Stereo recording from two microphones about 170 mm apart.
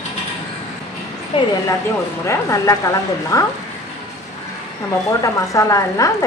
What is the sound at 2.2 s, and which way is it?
Speech, 15° left (ahead or behind).